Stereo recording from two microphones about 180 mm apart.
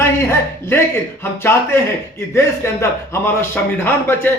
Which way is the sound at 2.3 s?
15° left (ahead or behind).